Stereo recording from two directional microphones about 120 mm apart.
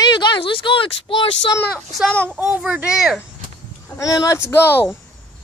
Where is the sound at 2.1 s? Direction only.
10° left (ahead or behind).